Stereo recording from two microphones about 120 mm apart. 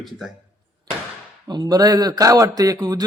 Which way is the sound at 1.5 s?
35° right (ahead or behind).